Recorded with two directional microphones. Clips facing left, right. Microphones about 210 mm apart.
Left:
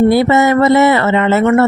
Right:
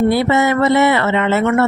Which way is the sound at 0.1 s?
40° left (ahead or behind).